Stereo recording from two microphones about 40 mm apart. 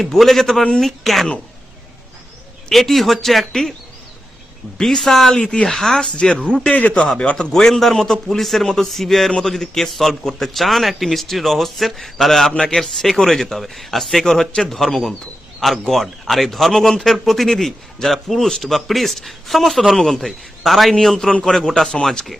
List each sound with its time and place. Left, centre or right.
0.0 s a man's voice: centre
2.6 s speech: centre
4.8 s a man's voice: centre
5.4 s speech: left
5.6 s a man's voice: centre
6.0 s speech: left
6.7 s a man's voice: left
7.5 s a man's voice: centre
20.0 s a man's voice: centre
20.2 s a man's voice: centre